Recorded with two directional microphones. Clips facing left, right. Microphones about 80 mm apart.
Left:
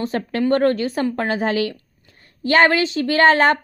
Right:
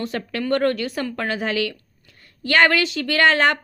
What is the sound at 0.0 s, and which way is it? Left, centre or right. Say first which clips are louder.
A woman's voice: left 5 dB; left.